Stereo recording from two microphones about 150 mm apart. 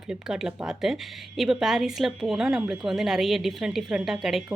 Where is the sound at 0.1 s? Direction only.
5° right (ahead or behind).